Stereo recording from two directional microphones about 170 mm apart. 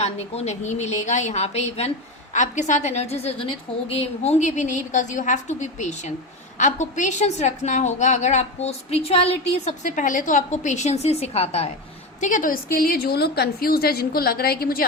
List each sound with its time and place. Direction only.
0.0 s a woman's voice: 40° left (ahead or behind)
12.2 s a woman's voice: 50° left (ahead or behind)